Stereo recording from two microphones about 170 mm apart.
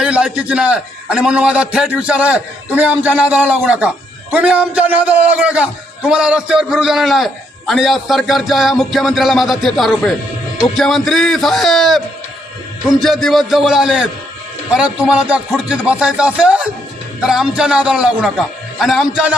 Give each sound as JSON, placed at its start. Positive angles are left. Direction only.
{"t": 0.0, "sound": "a man's voice", "side_deg": -5}